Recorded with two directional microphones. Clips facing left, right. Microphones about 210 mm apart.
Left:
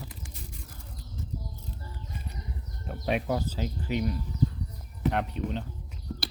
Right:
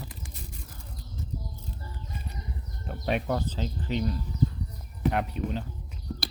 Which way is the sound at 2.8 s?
Centre (ahead or behind).